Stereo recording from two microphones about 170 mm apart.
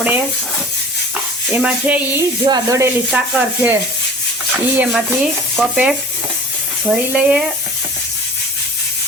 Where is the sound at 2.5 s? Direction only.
20° right (ahead or behind).